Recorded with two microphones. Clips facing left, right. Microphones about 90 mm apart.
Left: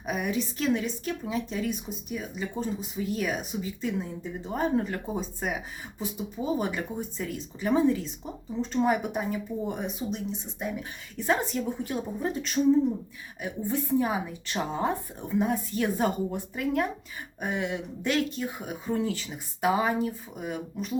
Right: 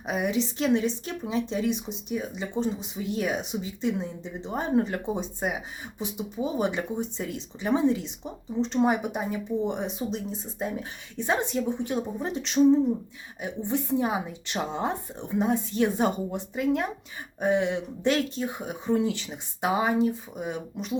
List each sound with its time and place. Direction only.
0.0 s a woman's voice: 25° right (ahead or behind)